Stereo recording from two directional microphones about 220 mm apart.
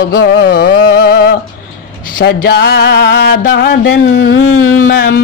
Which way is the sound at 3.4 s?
45° left (ahead or behind).